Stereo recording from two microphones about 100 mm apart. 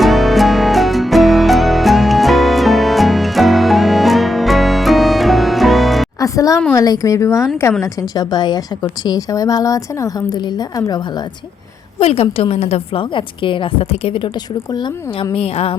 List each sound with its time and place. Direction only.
0.0 s music: centre (ahead or behind)
6.1 s music: 35° left (ahead or behind)
6.7 s a woman's voice: 35° left (ahead or behind)
11.9 s a woman's voice: 90° left; by 14.3 s 70° left (ahead or behind)
14.3 s a woman's voice: 45° left (ahead or behind); by 15.7 s 75° left (ahead or behind)